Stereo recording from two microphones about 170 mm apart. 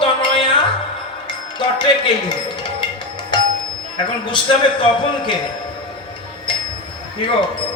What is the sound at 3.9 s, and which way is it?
A man's voice, 30° left (ahead or behind).